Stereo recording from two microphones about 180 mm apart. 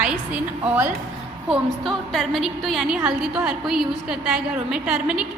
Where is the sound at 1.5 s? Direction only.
Centre (ahead or behind).